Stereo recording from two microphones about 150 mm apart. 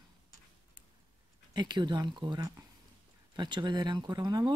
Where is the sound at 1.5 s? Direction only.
30° right (ahead or behind).